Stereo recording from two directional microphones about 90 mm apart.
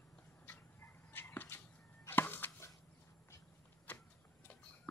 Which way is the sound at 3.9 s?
20° left (ahead or behind).